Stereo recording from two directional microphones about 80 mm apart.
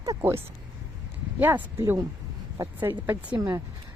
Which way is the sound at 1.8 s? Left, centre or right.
Right.